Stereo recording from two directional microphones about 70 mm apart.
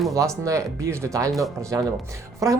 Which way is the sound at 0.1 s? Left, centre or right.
Right.